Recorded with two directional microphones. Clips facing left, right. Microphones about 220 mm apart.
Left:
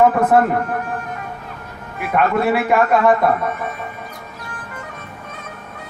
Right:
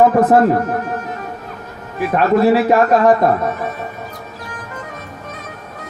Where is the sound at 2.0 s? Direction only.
35° right (ahead or behind).